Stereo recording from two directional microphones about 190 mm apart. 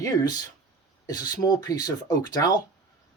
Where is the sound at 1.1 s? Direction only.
20° left (ahead or behind).